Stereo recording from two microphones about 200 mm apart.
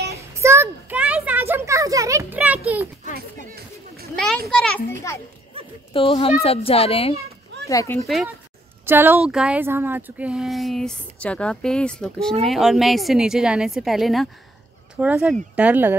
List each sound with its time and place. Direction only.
0.3 s a sound: 15° right (ahead or behind)
3.2 s chatter: 50° right (ahead or behind)
4.1 s children playing: 5° left (ahead or behind)
4.5 s speech: 5° left (ahead or behind)
5.9 s speech: 30° left (ahead or behind)
7.6 s speech: 15° left (ahead or behind)
8.8 s speech: 10° right (ahead or behind)